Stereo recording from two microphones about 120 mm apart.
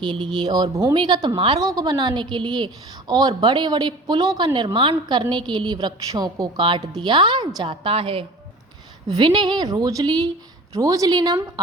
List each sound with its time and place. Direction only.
0.0 s a woman's voice: 40° right (ahead or behind)